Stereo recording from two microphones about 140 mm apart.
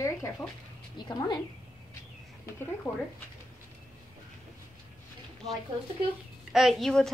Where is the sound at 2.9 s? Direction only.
20° left (ahead or behind).